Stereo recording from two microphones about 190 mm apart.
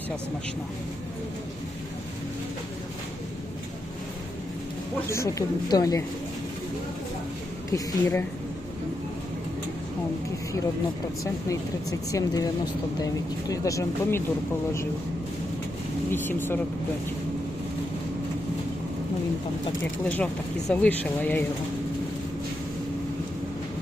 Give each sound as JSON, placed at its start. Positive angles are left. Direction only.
{"t": 5.0, "sound": "speech", "side_deg": 15}
{"t": 7.7, "sound": "speech", "side_deg": 15}
{"t": 11.2, "sound": "speech", "side_deg": 15}
{"t": 13.5, "sound": "speech", "side_deg": 15}
{"t": 16.1, "sound": "speech", "side_deg": 10}
{"t": 20.1, "sound": "speech", "side_deg": 10}